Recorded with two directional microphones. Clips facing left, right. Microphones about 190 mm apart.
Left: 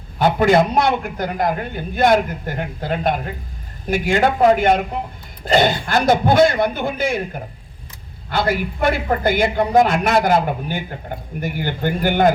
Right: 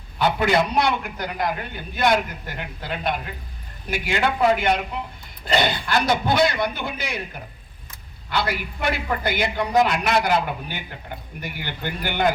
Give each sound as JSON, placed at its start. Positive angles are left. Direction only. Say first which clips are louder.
{"t": 0.2, "sound": "a woman's voice", "louder": "left 6 dB", "side_deg": 45}